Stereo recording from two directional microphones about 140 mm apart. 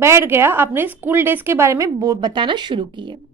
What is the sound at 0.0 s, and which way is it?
A woman's voice, 20° right (ahead or behind).